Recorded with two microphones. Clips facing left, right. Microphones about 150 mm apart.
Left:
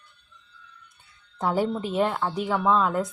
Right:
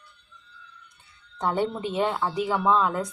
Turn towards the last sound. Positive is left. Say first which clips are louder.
# even
turn(degrees=0)  # may be behind; listen again after turning